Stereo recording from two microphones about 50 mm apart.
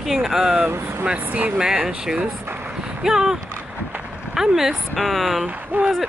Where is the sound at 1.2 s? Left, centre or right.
Right.